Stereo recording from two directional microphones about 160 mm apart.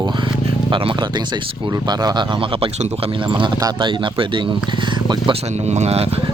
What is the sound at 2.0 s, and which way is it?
Speech, 30° right (ahead or behind).